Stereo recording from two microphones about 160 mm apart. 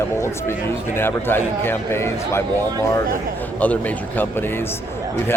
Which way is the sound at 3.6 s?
10° left (ahead or behind).